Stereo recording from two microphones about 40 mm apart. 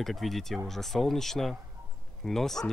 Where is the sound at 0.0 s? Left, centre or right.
Centre.